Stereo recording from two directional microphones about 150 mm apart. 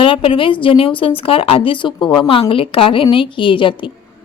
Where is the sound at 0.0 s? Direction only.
35° left (ahead or behind).